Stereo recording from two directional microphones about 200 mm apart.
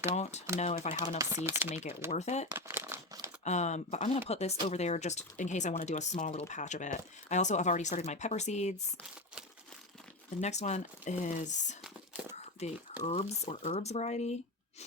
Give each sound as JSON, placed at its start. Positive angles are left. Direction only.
{"t": 0.1, "sound": "speech", "side_deg": 35}
{"t": 1.2, "sound": "speech", "side_deg": -10}
{"t": 2.0, "sound": "speech", "side_deg": 35}
{"t": 2.5, "sound": "crumpling", "side_deg": -15}
{"t": 3.4, "sound": "speech", "side_deg": 35}
{"t": 10.4, "sound": "speech", "side_deg": 35}
{"t": 11.8, "sound": "whispering", "side_deg": -5}
{"t": 12.6, "sound": "speech", "side_deg": 35}